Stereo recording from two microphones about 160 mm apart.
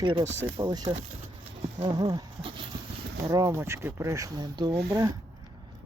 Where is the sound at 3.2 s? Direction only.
20° right (ahead or behind).